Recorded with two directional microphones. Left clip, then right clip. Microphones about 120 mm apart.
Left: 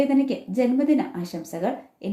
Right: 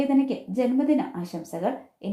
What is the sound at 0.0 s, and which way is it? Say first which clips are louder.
Speech: left 2 dB; 25° right (ahead or behind).